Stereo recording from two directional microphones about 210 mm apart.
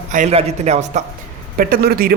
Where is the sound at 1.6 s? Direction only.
45° right (ahead or behind).